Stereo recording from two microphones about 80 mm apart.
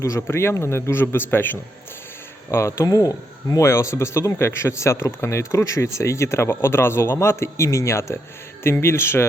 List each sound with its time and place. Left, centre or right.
0.0 s a man's voice: left
2.5 s speech: left